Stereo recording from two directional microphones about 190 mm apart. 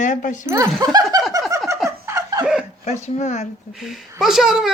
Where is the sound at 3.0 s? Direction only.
35° left (ahead or behind).